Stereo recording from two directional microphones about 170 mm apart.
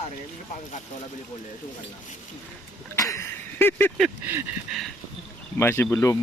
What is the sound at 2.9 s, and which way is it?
Speech, 15° left (ahead or behind).